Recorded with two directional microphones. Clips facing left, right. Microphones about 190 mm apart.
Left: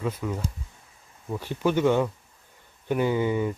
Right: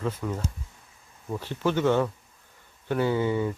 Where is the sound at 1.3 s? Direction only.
15° left (ahead or behind).